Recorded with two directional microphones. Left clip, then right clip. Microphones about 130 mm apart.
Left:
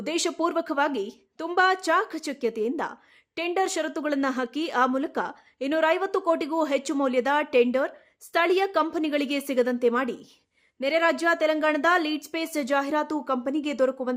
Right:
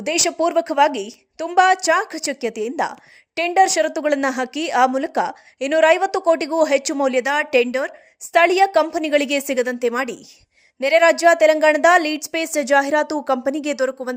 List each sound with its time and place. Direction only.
0.0 s a woman's voice: 15° right (ahead or behind)